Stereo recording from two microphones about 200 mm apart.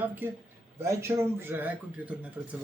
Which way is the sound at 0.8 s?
15° right (ahead or behind).